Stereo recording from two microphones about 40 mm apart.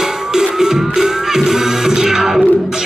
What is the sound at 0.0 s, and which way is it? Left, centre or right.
Music, centre.